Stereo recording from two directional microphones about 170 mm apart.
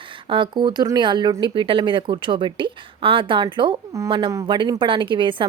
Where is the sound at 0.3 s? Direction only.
30° right (ahead or behind).